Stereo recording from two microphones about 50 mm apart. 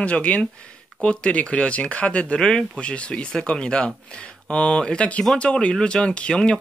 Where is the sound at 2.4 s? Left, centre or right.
Centre.